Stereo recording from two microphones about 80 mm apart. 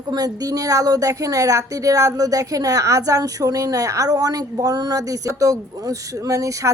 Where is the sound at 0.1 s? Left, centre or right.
Right.